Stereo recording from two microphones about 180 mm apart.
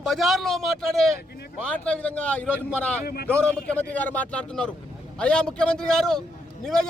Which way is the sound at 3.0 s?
60° left (ahead or behind).